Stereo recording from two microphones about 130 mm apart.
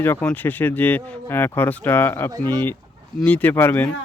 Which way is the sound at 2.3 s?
35° right (ahead or behind).